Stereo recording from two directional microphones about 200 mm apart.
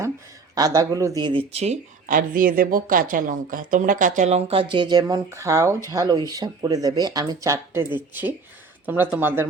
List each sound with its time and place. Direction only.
0.5 s speech: 20° right (ahead or behind)